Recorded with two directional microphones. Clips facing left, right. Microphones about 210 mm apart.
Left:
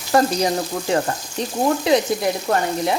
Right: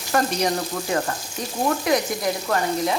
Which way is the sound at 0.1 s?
30° left (ahead or behind).